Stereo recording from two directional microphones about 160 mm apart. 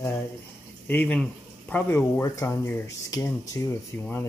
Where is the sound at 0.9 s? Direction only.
10° left (ahead or behind).